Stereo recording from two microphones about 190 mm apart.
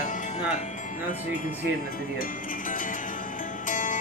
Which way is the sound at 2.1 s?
45° left (ahead or behind).